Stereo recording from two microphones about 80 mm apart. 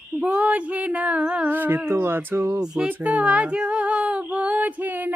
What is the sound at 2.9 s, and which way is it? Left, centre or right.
Female singing, centre.